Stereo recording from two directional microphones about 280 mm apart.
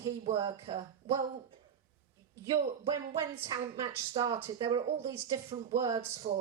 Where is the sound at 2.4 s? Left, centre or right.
Centre.